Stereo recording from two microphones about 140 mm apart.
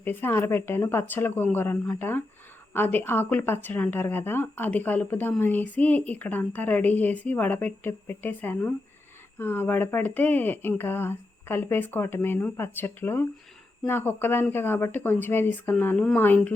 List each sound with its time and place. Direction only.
0.0 s a woman's voice: 15° left (ahead or behind)